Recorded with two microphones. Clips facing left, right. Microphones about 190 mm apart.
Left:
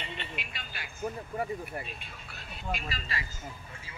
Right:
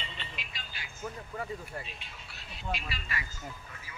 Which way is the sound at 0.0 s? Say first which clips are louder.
Left 4 dB; 60° left (ahead or behind).